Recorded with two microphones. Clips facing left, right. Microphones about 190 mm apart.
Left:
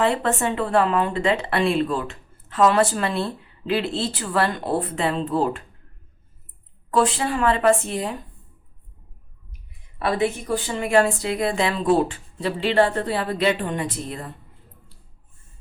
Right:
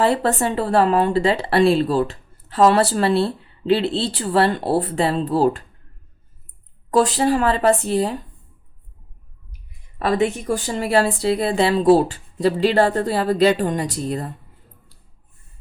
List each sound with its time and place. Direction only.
0.0 s speech: 35° right (ahead or behind)
6.9 s speech: 35° right (ahead or behind)
10.4 s speech: 40° right (ahead or behind)